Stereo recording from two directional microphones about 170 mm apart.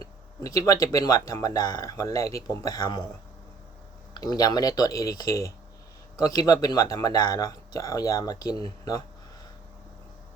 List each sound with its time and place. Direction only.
0.4 s speech: 20° left (ahead or behind)
4.1 s speech: 20° left (ahead or behind)